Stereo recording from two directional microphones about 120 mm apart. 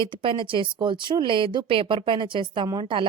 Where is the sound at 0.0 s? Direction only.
45° right (ahead or behind).